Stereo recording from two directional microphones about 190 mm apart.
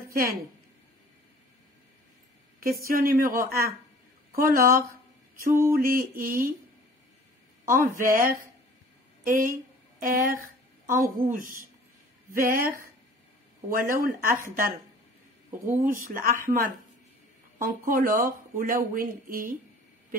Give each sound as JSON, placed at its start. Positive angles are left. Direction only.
{"t": 0.1, "sound": "a woman's voice", "side_deg": -50}
{"t": 2.9, "sound": "speech", "side_deg": -50}
{"t": 7.6, "sound": "speech", "side_deg": -45}
{"t": 13.7, "sound": "speech", "side_deg": -45}
{"t": 15.7, "sound": "speech", "side_deg": -45}